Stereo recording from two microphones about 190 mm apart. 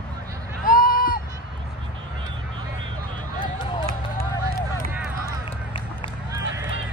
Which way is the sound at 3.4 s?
25° left (ahead or behind).